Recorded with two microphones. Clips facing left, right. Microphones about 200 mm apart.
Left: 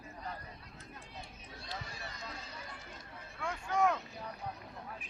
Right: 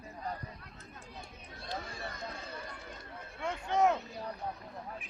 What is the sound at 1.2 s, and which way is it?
Run, 50° right (ahead or behind).